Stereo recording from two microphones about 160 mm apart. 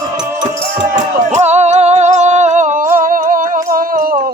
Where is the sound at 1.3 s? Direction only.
45° right (ahead or behind); by 4.2 s 60° right (ahead or behind).